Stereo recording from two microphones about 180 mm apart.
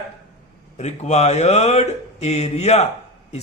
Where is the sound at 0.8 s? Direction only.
40° left (ahead or behind).